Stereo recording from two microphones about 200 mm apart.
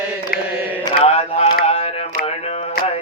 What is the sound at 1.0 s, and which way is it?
Mantra, 30° left (ahead or behind).